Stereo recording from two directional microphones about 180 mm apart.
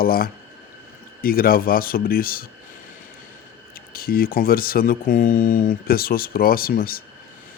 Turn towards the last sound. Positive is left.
turn(degrees=55)  # may be behind; listen again after turning